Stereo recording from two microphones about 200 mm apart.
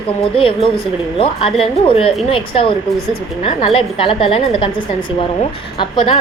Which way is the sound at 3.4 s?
30° left (ahead or behind).